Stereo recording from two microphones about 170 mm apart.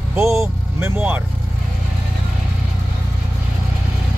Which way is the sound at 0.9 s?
10° right (ahead or behind).